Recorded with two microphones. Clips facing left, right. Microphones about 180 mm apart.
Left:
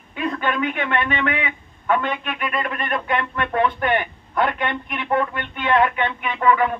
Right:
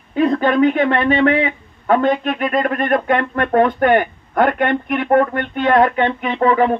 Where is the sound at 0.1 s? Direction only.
35° right (ahead or behind).